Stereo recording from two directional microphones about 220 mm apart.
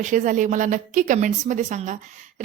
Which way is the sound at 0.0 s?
35° right (ahead or behind).